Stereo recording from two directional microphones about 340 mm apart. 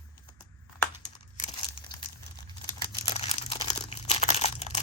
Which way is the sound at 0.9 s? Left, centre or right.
Centre.